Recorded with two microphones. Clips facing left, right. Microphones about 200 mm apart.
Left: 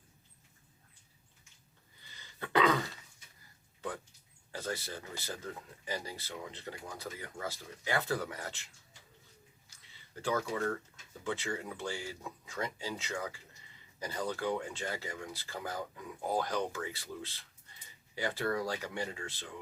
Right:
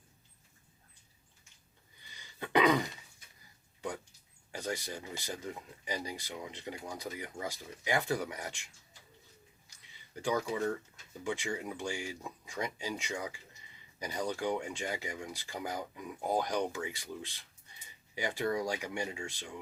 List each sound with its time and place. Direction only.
2.1 s throat clearing: 15° right (ahead or behind)
3.8 s a sound: 15° right (ahead or behind)
4.5 s speech: 15° right (ahead or behind)
10.2 s speech: 15° right (ahead or behind)